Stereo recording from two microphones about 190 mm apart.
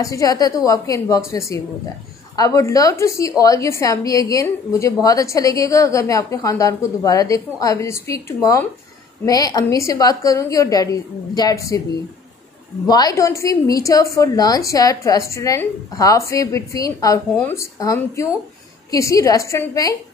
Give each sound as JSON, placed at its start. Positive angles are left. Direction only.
{"t": 0.0, "sound": "a woman's voice", "side_deg": 15}
{"t": 12.8, "sound": "a woman's voice", "side_deg": 20}